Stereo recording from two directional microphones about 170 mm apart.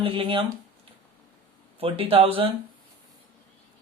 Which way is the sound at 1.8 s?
35° right (ahead or behind).